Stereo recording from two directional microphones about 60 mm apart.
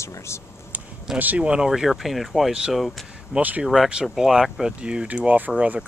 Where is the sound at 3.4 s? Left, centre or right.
Right.